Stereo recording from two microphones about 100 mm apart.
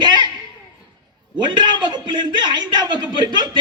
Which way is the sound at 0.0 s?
45° right (ahead or behind).